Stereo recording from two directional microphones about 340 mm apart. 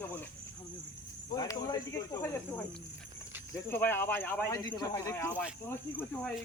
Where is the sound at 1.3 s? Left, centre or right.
Centre.